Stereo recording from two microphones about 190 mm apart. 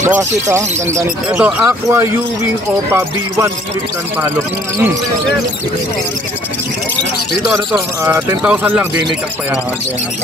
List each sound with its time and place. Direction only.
0.2 s speech: 15° right (ahead or behind)
8.0 s speech: 10° right (ahead or behind)